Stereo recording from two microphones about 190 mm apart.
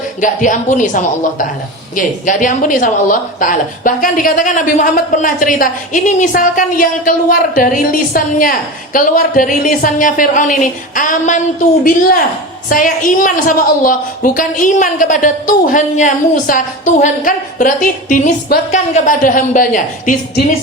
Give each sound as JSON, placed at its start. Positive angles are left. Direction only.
{"t": 0.2, "sound": "a woman's voice", "side_deg": 45}
{"t": 12.6, "sound": "a woman's voice", "side_deg": 45}